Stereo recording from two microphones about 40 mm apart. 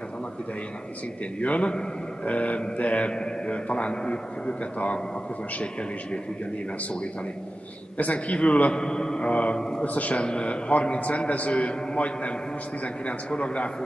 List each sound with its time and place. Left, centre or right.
1.4 s a man's voice: left
3.1 s a man's voice: left
4.7 s a man's voice: left
8.0 s a man's voice: left
8.7 s a man's voice: centre
9.3 s a man's voice: left
9.6 s a man's voice: centre
9.8 s a man's voice: left
10.2 s a man's voice: left